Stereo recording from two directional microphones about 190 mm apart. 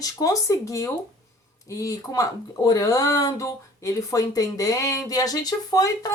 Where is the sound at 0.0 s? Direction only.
20° left (ahead or behind).